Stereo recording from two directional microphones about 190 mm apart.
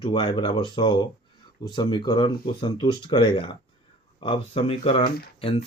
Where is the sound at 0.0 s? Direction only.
25° left (ahead or behind).